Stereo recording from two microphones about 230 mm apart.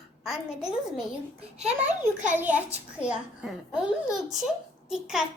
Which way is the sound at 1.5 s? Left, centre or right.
Right.